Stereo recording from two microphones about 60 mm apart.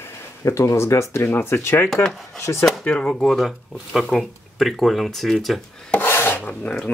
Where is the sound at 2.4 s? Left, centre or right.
Left.